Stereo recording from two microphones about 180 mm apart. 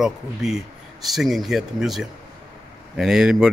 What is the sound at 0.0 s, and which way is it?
Speech, centre (ahead or behind).